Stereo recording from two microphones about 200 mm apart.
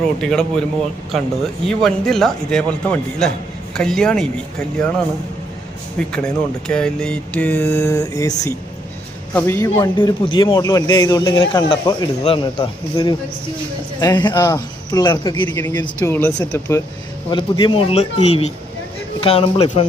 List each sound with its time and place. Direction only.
0.2 s a man's voice: 5° left (ahead or behind)
1.6 s a man's voice: centre (ahead or behind)
6.0 s a man's voice: 5° left (ahead or behind); by 19.9 s 25° left (ahead or behind)